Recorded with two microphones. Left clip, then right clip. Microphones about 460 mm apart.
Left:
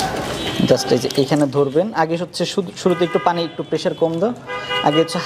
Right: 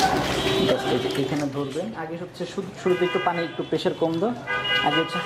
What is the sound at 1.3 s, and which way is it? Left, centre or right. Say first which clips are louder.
Speech: left 11 dB; left.